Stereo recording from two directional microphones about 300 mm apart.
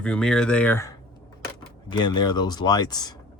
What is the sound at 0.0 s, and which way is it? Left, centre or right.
Speech, centre.